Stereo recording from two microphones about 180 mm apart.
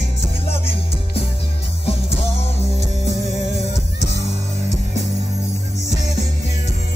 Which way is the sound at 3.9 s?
75° left (ahead or behind).